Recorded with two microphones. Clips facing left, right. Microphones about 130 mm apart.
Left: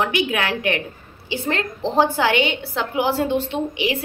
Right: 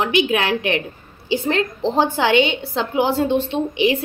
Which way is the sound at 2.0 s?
25° right (ahead or behind).